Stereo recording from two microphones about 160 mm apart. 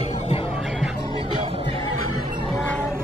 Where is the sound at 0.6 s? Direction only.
Centre (ahead or behind).